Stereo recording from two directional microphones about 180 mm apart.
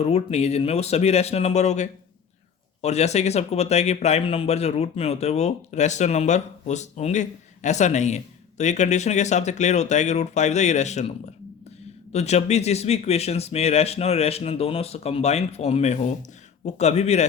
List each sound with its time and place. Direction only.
0.0 s speech: 35° left (ahead or behind)
12.1 s speech: 35° left (ahead or behind)